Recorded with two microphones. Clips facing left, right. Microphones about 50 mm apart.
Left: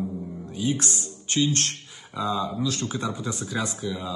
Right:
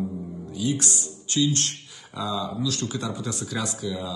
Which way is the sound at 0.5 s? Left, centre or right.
Left.